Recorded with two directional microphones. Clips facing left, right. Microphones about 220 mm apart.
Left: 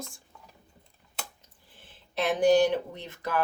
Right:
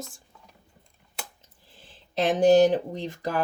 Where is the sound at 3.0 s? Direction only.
35° right (ahead or behind).